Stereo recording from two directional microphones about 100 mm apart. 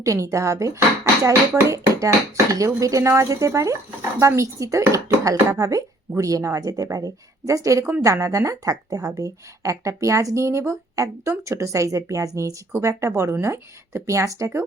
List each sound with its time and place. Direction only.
0.0 s a woman's voice: 30° right (ahead or behind)